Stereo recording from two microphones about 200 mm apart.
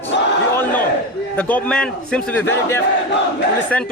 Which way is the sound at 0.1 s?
60° left (ahead or behind).